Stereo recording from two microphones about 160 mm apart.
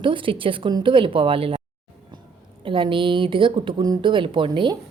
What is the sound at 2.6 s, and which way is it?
A woman's voice, 30° right (ahead or behind).